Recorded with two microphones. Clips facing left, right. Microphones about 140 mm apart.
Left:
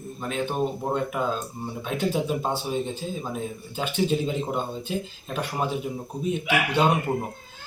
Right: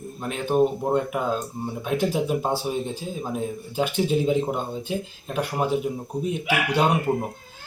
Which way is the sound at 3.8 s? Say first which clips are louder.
Right 2 dB; 10° right (ahead or behind).